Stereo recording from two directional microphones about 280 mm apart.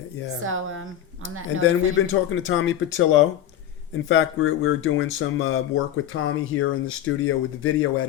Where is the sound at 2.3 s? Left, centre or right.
Left.